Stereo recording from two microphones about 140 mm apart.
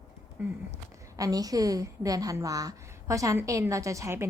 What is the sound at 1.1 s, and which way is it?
A woman's voice, 25° right (ahead or behind).